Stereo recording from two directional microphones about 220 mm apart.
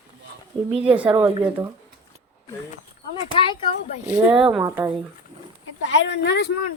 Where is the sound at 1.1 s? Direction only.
15° right (ahead or behind).